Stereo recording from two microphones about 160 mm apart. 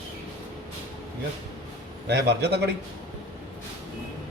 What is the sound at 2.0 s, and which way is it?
Speech, 90° right.